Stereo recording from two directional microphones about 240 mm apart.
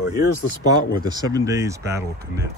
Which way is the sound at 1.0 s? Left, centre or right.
Centre.